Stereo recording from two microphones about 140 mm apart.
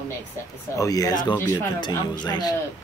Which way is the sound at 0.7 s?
25° left (ahead or behind).